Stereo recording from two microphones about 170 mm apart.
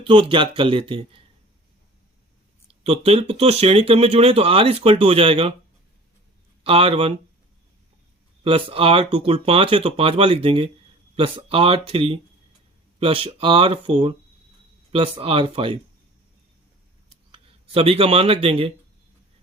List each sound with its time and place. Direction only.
0.0 s speech: 30° right (ahead or behind)
2.8 s speech: 35° right (ahead or behind)
6.7 s speech: 35° right (ahead or behind)
8.4 s speech: 35° right (ahead or behind)
17.3 s speech: 35° right (ahead or behind)